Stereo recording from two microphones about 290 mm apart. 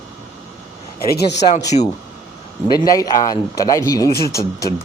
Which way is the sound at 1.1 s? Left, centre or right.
Left.